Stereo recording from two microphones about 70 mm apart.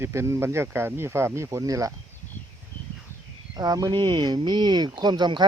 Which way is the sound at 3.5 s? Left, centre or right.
Right.